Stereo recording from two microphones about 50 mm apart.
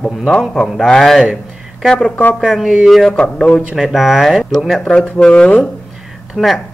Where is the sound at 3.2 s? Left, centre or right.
Centre.